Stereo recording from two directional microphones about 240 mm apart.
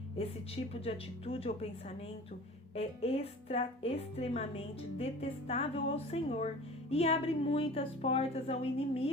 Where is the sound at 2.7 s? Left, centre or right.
Left.